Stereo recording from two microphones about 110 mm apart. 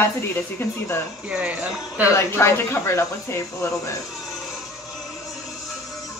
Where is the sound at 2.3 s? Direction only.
25° left (ahead or behind).